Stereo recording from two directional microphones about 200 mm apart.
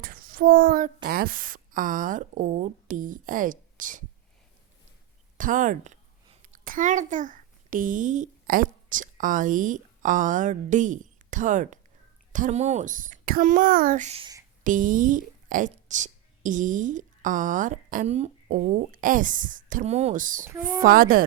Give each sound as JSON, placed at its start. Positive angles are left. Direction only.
{"t": 0.0, "sound": "a sound", "side_deg": -45}
{"t": 1.0, "sound": "speech", "side_deg": -45}
{"t": 5.4, "sound": "a woman's voice", "side_deg": -40}
{"t": 20.4, "sound": "a woman's voice", "side_deg": -10}
{"t": 20.8, "sound": "speech", "side_deg": -45}